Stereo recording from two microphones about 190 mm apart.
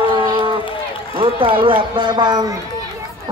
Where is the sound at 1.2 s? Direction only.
25° right (ahead or behind).